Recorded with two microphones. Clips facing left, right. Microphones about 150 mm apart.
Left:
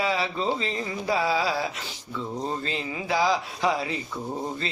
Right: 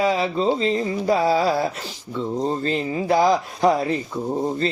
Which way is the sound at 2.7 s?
40° right (ahead or behind).